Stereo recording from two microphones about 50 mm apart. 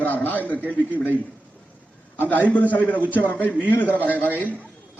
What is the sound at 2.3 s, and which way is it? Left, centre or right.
Speech, left.